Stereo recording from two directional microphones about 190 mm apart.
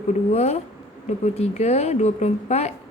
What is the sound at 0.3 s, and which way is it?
Speech, 35° left (ahead or behind).